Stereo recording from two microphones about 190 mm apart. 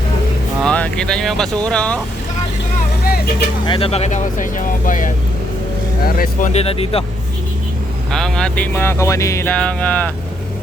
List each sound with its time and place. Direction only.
0.6 s speech: 5° left (ahead or behind)
3.0 s vehicle: 55° left (ahead or behind)
3.7 s speech: 30° left (ahead or behind)
6.1 s speech: 50° left (ahead or behind)
6.5 s speech: 30° left (ahead or behind)
8.1 s speech: 5° left (ahead or behind)